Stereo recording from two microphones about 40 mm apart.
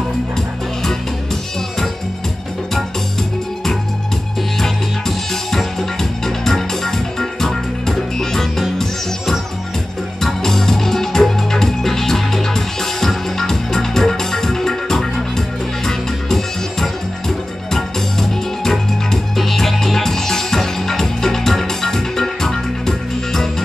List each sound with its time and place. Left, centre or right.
4.6 s music: centre
10.2 s music: centre